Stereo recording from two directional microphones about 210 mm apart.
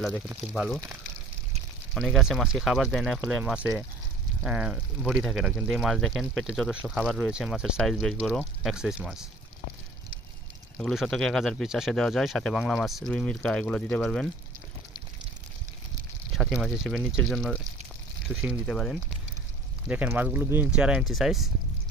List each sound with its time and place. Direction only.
0.3 s speech: 5° right (ahead or behind)
2.0 s speech: centre (ahead or behind)
10.8 s speech: centre (ahead or behind)
16.3 s speech: centre (ahead or behind)